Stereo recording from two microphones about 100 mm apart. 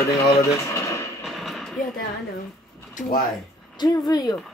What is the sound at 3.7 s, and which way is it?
Speech, 45° left (ahead or behind).